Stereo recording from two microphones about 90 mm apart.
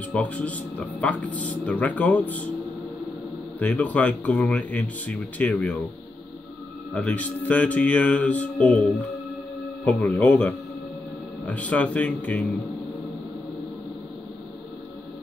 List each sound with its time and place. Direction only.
0.1 s speech: 15° left (ahead or behind)
3.5 s speech: 15° left (ahead or behind)
6.9 s speech: 15° left (ahead or behind)
9.8 s speech: 15° left (ahead or behind)